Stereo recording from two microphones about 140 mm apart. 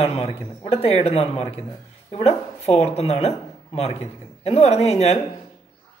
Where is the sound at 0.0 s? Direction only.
45° left (ahead or behind).